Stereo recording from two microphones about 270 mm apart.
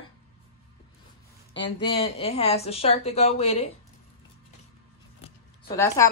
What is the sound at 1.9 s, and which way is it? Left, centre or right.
Speech, left.